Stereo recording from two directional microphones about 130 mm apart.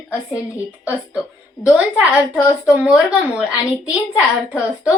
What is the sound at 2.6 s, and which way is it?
A woman's voice, 5° right (ahead or behind).